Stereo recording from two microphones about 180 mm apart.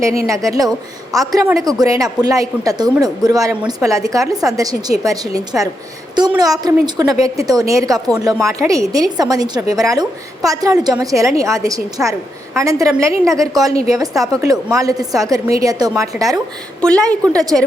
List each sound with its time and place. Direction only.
0.3 s a woman's voice: 20° right (ahead or behind)
16.8 s a woman's voice: 5° left (ahead or behind)